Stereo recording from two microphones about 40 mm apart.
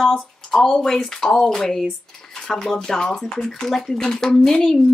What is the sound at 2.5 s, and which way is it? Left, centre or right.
Speech, centre.